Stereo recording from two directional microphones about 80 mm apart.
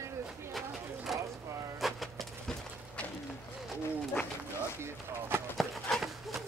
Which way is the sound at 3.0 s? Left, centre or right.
Centre.